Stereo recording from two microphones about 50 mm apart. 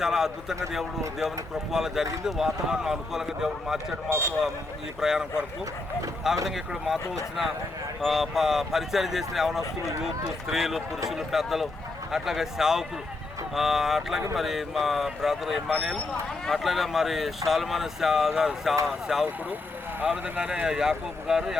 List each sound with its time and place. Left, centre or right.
0.0 s speech: centre
4.1 s speech: right
4.9 s speech: centre
6.3 s speech: centre
8.0 s speech: centre
20.1 s speech: right
20.7 s speech: centre